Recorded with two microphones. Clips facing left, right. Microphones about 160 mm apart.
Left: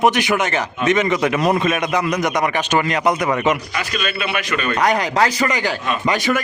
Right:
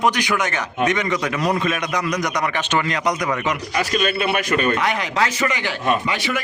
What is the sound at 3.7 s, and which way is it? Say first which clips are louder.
Speech: right 3 dB; 40° right (ahead or behind).